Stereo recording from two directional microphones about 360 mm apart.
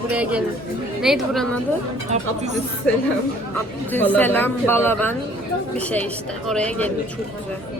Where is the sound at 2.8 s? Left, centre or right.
Centre.